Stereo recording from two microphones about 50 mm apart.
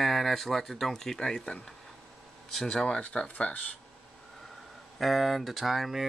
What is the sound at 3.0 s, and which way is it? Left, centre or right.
Speech, left.